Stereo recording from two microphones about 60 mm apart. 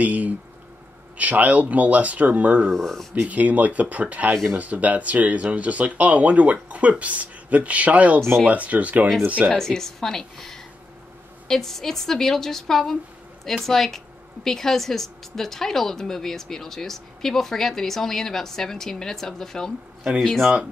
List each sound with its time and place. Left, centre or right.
0.0 s a sound: right
1.1 s speech: right
2.7 s a woman's voice: centre
3.2 s speech: right
9.5 s a woman's voice: centre
20.0 s speech: centre